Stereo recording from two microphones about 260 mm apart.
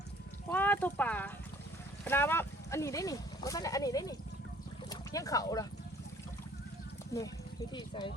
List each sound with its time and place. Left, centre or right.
0.5 s a sound: centre
2.0 s speech: centre
7.1 s speech: centre